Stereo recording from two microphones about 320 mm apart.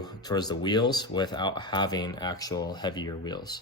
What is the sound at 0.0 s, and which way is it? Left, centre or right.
Speech, centre.